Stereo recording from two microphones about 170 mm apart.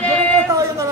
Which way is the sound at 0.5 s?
15° right (ahead or behind).